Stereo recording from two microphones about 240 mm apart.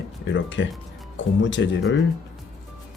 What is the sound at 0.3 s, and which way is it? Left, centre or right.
Speech, left.